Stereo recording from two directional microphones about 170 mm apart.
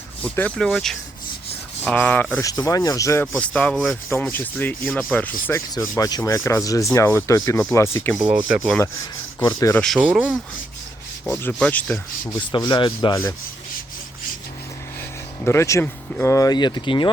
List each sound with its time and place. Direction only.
0.2 s speech: 10° left (ahead or behind)
1.8 s rub: 10° left (ahead or behind)
8.1 s speech: 5° right (ahead or behind)
9.4 s speech: 20° left (ahead or behind)
9.8 s speech: 5° right (ahead or behind)
11.6 s rub: 10° left (ahead or behind)
12.2 s speech: 25° left (ahead or behind)
15.4 s speech: 15° left (ahead or behind)